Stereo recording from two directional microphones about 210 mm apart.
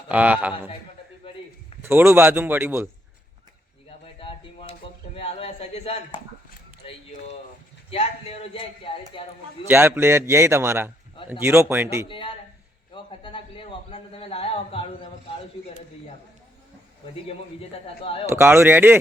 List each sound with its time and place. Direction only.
0.1 s a man's voice: 5° right (ahead or behind)
1.2 s a sound: 25° left (ahead or behind)
1.8 s a man's voice: 10° right (ahead or behind)
3.8 s a sound: 25° left (ahead or behind)
7.9 s speech: 25° left (ahead or behind)
9.6 s a man's voice: 10° right (ahead or behind)
12.0 s speech: 25° left (ahead or behind)
12.9 s a sound: 25° left (ahead or behind)
18.0 s speech: 25° left (ahead or behind)
18.3 s a man's voice: 10° right (ahead or behind)